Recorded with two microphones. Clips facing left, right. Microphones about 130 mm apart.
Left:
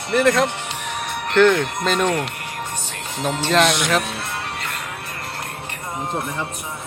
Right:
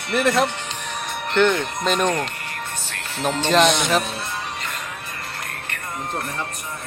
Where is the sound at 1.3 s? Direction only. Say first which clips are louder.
Left 4 dB; centre (ahead or behind).